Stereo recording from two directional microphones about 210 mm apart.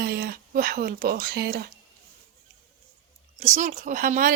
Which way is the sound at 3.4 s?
35° right (ahead or behind).